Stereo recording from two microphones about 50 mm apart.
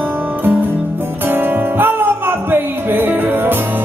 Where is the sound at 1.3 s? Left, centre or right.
Right.